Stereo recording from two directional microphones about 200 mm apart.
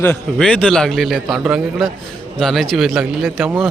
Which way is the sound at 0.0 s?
5° left (ahead or behind).